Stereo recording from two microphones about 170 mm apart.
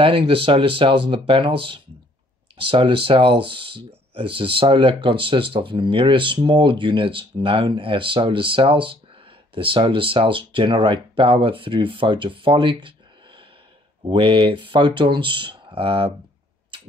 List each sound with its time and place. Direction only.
0.0 s speech: 30° right (ahead or behind)
14.0 s speech: 30° right (ahead or behind)